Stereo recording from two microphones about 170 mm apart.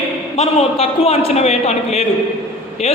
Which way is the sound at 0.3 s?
35° left (ahead or behind).